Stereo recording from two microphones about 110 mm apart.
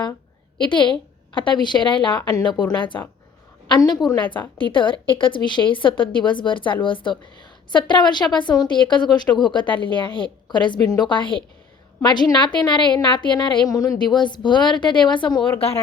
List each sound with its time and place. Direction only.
0.6 s a woman's voice: 45° left (ahead or behind)